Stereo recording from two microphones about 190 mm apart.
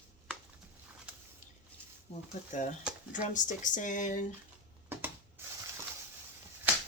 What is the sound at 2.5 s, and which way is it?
Speech, 40° left (ahead or behind).